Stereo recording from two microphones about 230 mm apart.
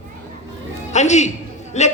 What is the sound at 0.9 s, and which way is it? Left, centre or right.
Speech, left.